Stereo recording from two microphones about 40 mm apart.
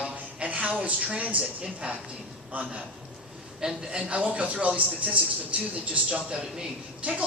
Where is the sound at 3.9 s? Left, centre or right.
Right.